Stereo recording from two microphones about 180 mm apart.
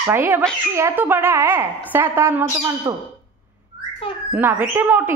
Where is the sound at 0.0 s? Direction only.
15° right (ahead or behind).